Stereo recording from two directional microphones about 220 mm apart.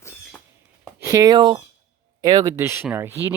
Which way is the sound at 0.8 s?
10° right (ahead or behind).